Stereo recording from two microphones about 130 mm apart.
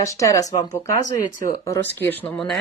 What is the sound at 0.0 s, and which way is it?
Speech, 25° left (ahead or behind).